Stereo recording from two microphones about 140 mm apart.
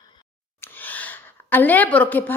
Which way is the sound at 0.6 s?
15° left (ahead or behind).